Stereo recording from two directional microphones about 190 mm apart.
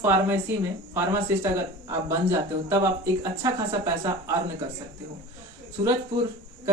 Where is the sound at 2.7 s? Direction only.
15° right (ahead or behind).